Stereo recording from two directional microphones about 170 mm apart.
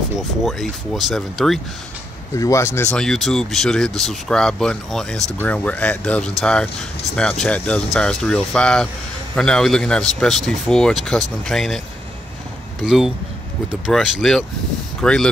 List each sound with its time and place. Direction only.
0.5 s speech: centre (ahead or behind)
2.3 s speech: 15° left (ahead or behind)
2.9 s speech: 5° left (ahead or behind)
12.8 s speech: 5° right (ahead or behind)